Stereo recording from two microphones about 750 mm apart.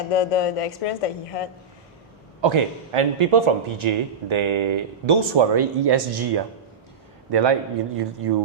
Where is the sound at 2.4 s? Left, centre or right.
Right.